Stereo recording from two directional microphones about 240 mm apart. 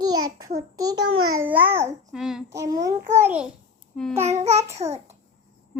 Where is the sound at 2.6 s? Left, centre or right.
Centre.